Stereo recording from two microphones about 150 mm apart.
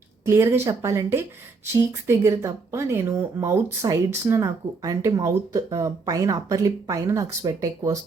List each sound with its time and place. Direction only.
0.3 s a woman's voice: 15° right (ahead or behind)